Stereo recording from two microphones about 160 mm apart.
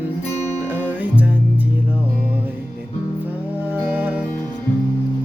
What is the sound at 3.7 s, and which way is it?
Music, 10° right (ahead or behind).